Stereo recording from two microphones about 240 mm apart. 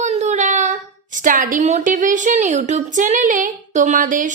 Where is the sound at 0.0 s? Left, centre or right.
Right.